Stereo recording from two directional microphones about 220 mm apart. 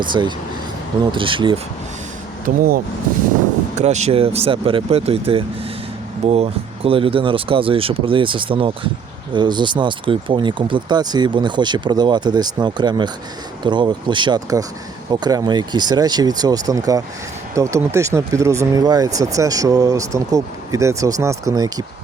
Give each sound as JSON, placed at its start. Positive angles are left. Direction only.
{"t": 0.1, "sound": "speech", "side_deg": -20}
{"t": 2.4, "sound": "speech", "side_deg": -40}